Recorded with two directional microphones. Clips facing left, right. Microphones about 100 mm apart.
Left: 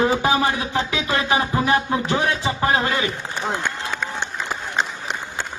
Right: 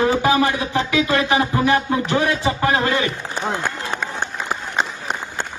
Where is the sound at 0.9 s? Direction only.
25° left (ahead or behind).